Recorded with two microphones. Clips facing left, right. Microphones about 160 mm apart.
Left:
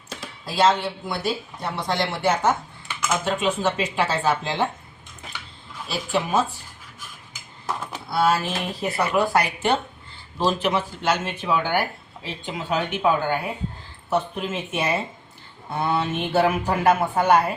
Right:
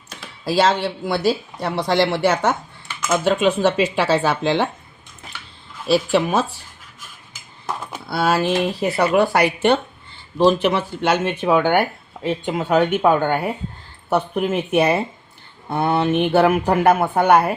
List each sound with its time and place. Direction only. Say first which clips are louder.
0.4 s speech: right 3 dB; 75° right (ahead or behind)
5.9 s speech: right 7 dB; 75° right (ahead or behind)
8.1 s speech: right 3 dB; 75° right (ahead or behind)